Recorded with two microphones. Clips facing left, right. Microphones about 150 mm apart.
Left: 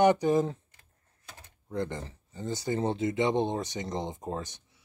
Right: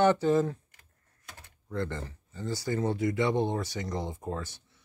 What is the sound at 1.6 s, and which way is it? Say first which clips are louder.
Speech: left 1 dB; 20° left (ahead or behind).